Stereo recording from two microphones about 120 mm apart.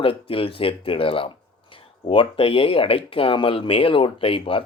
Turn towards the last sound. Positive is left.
turn(degrees=50)  # may be behind; listen again after turning